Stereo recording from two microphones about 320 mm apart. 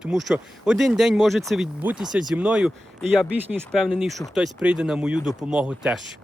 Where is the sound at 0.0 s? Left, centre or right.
Centre.